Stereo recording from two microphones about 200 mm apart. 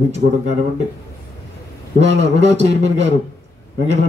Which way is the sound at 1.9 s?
35° right (ahead or behind).